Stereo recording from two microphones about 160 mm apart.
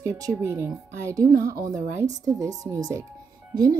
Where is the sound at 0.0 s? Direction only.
20° right (ahead or behind).